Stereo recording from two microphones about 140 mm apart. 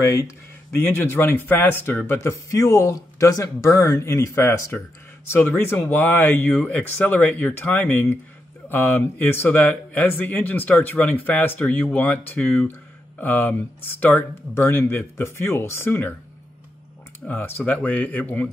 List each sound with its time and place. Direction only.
0.1 s speech: 20° left (ahead or behind)
17.3 s speech: 10° left (ahead or behind)